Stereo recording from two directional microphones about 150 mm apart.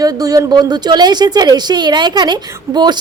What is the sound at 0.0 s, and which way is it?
A woman's voice, 25° right (ahead or behind).